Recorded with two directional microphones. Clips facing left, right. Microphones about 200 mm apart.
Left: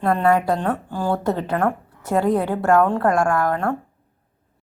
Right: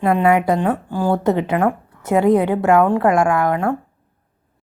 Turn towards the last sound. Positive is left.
turn(degrees=-10)  # may be behind; listen again after turning